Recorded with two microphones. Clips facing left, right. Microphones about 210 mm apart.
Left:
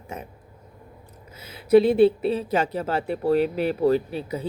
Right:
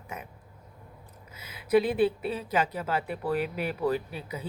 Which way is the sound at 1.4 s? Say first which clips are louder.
Left 7 dB; 30° left (ahead or behind).